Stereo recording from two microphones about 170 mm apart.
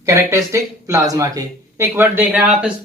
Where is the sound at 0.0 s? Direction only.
20° right (ahead or behind).